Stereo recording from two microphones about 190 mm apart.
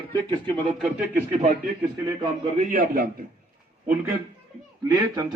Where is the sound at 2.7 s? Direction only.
50° right (ahead or behind).